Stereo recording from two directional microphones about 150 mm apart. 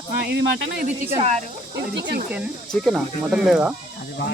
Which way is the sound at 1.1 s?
45° right (ahead or behind).